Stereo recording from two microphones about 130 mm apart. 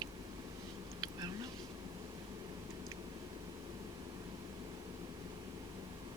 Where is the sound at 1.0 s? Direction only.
30° right (ahead or behind).